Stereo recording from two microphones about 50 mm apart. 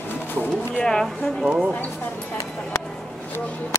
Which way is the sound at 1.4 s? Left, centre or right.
Centre.